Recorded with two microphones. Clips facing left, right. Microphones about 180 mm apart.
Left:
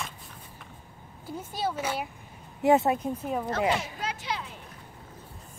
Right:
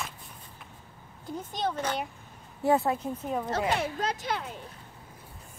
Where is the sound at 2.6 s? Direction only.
20° left (ahead or behind).